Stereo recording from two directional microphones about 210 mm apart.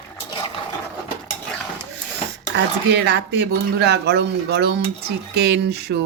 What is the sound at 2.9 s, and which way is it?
Speech, 55° right (ahead or behind).